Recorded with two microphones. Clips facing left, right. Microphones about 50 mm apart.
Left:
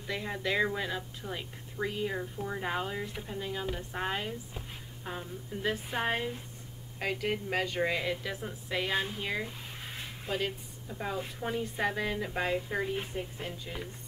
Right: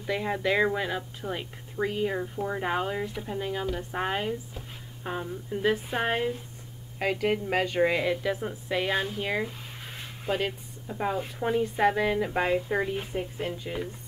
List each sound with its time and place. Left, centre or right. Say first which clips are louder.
0.0 s a woman's voice: right 6 dB; centre